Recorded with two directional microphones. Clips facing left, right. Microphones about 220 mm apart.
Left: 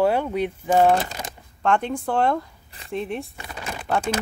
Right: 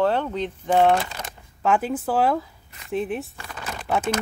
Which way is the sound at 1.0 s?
20° left (ahead or behind).